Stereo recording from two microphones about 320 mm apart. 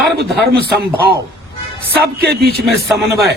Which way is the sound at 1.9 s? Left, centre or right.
Right.